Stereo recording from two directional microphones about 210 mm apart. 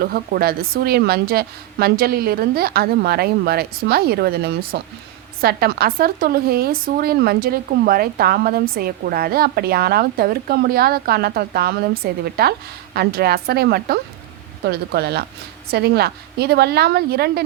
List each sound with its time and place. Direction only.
0.0 s speech: 45° right (ahead or behind)